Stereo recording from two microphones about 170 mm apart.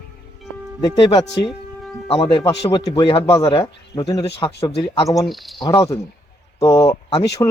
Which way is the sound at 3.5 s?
30° left (ahead or behind).